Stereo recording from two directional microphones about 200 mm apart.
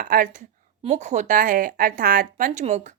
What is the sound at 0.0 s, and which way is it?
A woman's voice, 40° right (ahead or behind).